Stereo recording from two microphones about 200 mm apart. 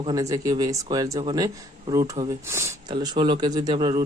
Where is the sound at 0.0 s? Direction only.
15° right (ahead or behind).